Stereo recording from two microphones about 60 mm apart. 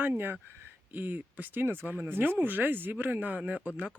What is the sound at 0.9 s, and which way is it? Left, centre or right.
Speech, right.